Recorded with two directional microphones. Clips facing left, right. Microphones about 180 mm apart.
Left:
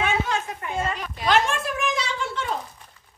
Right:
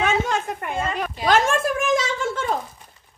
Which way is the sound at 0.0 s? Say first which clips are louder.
Right 3 dB; 50° right (ahead or behind).